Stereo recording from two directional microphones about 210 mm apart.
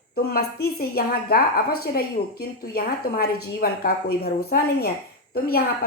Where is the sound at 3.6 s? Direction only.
45° left (ahead or behind).